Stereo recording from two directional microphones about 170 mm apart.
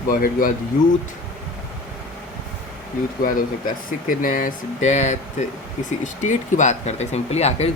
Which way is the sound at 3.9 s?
55° left (ahead or behind).